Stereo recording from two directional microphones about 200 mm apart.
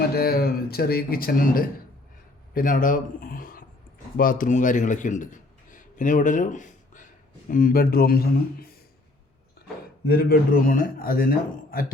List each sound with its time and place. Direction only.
0.1 s a man's voice: 50° left (ahead or behind)
10.1 s a man's voice: 50° left (ahead or behind)